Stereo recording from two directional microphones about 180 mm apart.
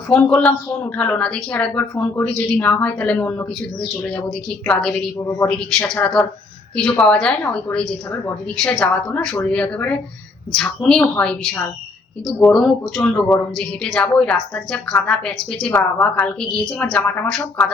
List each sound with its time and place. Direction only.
0.1 s a woman's voice: 5° left (ahead or behind)